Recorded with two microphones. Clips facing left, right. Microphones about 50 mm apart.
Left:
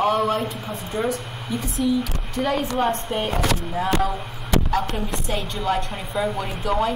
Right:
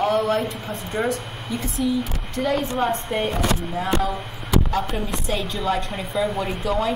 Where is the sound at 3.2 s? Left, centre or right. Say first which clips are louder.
Even; left.